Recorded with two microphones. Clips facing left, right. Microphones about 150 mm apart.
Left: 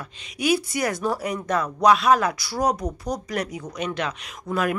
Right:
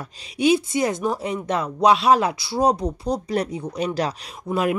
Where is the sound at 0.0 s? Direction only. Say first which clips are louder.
Right 6 dB; 25° right (ahead or behind).